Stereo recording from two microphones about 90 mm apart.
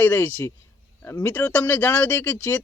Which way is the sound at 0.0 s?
20° left (ahead or behind).